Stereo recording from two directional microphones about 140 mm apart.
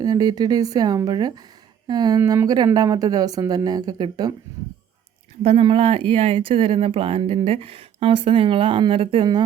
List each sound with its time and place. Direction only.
0.0 s speech: 30° right (ahead or behind)
5.4 s speech: 45° right (ahead or behind)